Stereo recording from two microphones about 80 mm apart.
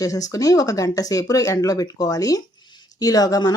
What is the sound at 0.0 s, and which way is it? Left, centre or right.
Speech, left.